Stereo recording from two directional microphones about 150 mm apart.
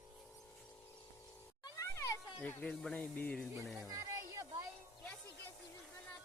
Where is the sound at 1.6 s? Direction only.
20° left (ahead or behind).